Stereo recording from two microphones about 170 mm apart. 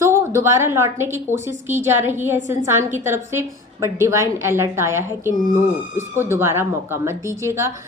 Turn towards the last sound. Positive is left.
turn(degrees=-15)  # may be behind; listen again after turning